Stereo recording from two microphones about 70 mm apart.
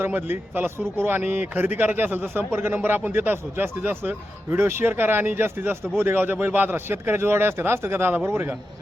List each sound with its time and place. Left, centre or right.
0.0 s speech: right